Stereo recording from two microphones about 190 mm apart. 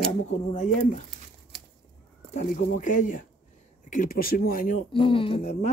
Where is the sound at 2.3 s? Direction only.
40° left (ahead or behind).